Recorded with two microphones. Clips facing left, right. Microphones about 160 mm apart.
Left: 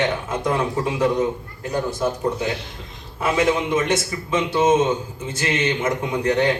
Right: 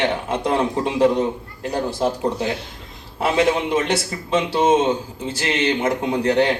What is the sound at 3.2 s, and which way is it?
A man's voice, 30° right (ahead or behind).